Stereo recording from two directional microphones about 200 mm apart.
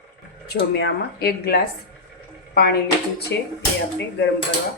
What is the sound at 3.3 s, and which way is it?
Speech, 55° left (ahead or behind).